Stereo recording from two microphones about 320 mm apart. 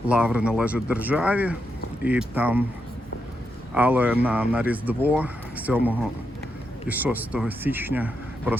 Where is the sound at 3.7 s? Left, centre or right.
Centre.